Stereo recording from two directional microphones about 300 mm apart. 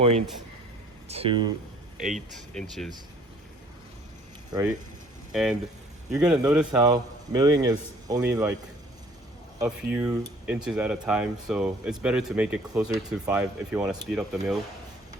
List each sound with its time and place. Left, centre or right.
1.0 s speech: centre
2.0 s speech: centre
5.3 s speech: centre
9.6 s speech: centre